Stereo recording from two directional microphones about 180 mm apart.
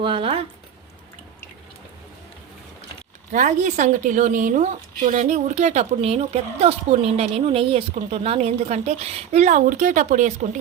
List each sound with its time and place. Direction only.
0.0 s speech: 30° right (ahead or behind)
3.3 s speech: 45° right (ahead or behind)